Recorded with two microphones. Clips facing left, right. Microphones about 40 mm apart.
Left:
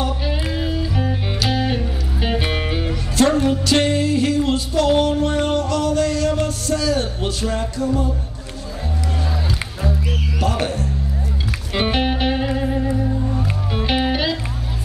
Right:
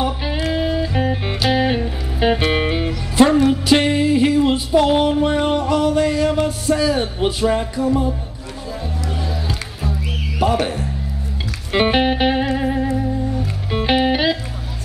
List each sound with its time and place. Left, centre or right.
0.0 s music: centre
10.4 s music: centre
11.7 s music: centre